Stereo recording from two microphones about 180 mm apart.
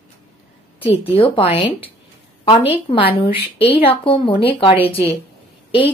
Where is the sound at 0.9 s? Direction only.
35° left (ahead or behind).